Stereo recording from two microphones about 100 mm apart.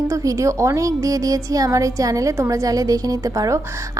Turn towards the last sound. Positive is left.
turn(degrees=-35)  # may be behind; listen again after turning